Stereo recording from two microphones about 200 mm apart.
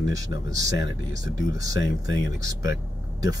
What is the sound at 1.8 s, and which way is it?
Speech, 70° left (ahead or behind).